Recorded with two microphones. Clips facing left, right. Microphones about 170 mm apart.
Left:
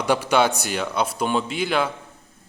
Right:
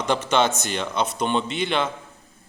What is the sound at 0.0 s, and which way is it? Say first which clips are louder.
A man's voice: left 2 dB; 10° left (ahead or behind).